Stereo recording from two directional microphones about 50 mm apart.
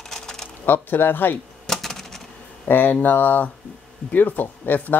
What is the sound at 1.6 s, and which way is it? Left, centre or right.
Typewriter, centre.